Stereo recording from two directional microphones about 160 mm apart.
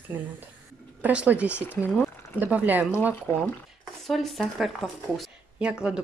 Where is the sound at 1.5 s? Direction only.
15° left (ahead or behind).